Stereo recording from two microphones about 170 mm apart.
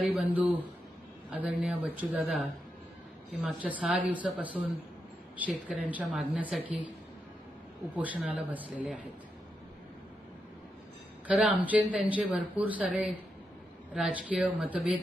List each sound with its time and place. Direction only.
0.0 s speech: 5° right (ahead or behind)
7.9 s speech: 10° right (ahead or behind)
11.3 s speech: 10° right (ahead or behind)